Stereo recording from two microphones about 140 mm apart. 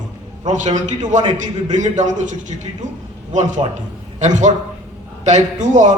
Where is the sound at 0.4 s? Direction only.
60° right (ahead or behind).